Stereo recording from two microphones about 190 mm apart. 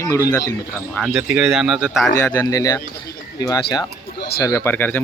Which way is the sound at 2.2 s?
15° left (ahead or behind).